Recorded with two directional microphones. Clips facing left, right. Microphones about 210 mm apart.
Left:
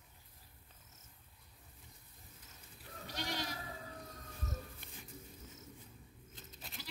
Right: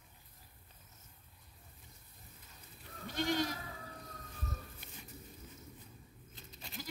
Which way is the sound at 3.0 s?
50° right (ahead or behind).